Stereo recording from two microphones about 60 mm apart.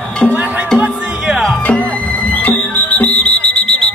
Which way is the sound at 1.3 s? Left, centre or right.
Centre.